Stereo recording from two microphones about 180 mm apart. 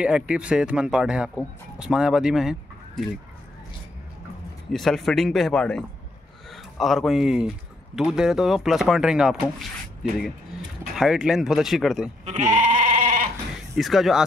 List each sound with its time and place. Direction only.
0.0 s speech: 5° right (ahead or behind)
4.7 s speech: centre (ahead or behind)
11.0 s speech: 5° right (ahead or behind)
12.3 s goat: 45° right (ahead or behind)
13.7 s speech: centre (ahead or behind)